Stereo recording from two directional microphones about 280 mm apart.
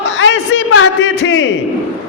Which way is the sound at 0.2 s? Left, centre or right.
Left.